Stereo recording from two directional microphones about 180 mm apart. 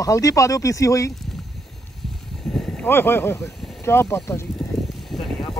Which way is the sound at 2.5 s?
5° left (ahead or behind).